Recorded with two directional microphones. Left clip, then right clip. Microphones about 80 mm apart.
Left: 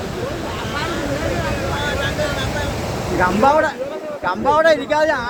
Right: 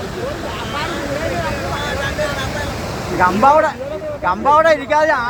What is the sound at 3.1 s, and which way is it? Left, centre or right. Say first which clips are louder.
Speech: right 3 dB; left.